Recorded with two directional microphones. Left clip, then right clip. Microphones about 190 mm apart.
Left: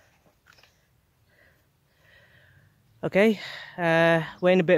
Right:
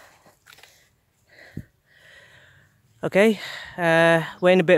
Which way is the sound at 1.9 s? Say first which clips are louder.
Right 7 dB; 10° right (ahead or behind).